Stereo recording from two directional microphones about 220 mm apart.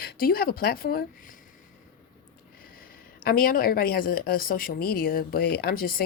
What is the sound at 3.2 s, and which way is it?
Speech, 40° left (ahead or behind).